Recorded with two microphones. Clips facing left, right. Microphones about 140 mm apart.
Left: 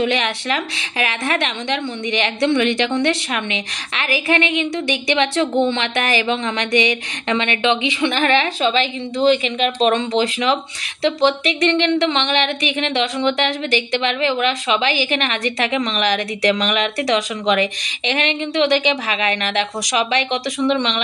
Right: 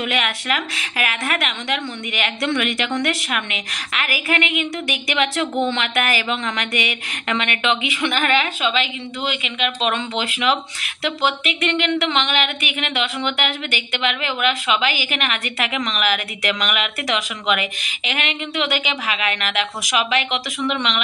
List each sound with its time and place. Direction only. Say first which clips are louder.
0.0 s a woman's voice: left 4 dB; 30° left (ahead or behind)